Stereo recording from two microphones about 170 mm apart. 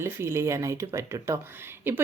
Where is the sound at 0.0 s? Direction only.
15° right (ahead or behind).